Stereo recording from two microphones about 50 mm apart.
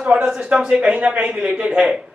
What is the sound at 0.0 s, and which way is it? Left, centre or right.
A woman's voice, centre.